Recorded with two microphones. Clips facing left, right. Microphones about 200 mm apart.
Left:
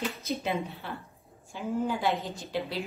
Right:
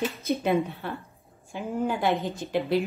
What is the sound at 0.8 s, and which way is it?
Speech, 55° right (ahead or behind).